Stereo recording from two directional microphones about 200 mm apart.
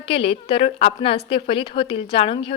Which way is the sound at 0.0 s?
25° left (ahead or behind).